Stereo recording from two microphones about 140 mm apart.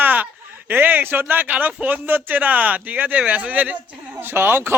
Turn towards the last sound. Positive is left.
turn(degrees=-15)  # may be behind; listen again after turning